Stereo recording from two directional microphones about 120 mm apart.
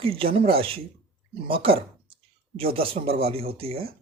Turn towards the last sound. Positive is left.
turn(degrees=-55)  # may be behind; listen again after turning